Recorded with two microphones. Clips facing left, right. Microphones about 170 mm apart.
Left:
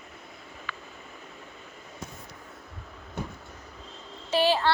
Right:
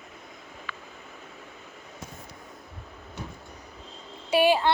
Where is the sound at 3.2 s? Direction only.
55° left (ahead or behind).